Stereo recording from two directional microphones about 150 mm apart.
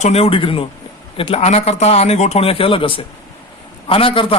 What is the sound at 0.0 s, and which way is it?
A man's voice, 45° left (ahead or behind).